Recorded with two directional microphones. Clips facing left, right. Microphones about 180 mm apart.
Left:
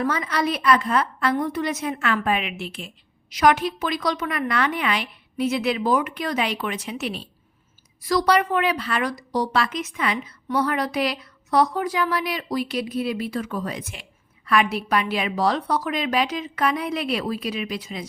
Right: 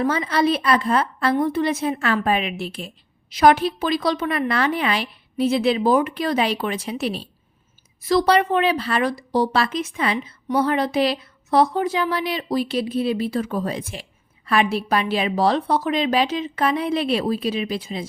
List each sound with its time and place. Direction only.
0.0 s a woman's voice: 30° right (ahead or behind)